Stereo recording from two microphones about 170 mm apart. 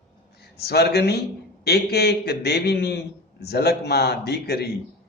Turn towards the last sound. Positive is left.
turn(degrees=70)  # may be behind; listen again after turning